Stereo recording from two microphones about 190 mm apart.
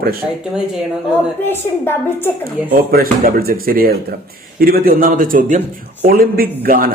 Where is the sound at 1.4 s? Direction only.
10° left (ahead or behind).